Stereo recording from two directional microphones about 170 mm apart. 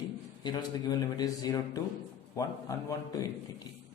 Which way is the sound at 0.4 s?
25° left (ahead or behind).